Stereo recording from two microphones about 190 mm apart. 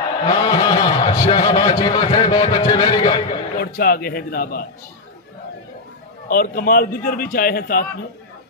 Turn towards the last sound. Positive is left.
turn(degrees=50)  # may be behind; listen again after turning